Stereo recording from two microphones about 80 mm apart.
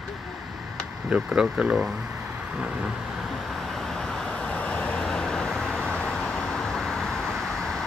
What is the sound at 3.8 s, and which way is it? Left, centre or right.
Vehicle, centre.